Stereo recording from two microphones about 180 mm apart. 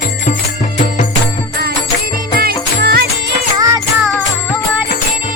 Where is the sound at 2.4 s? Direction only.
60° right (ahead or behind).